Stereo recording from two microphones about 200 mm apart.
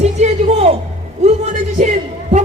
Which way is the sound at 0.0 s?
35° right (ahead or behind).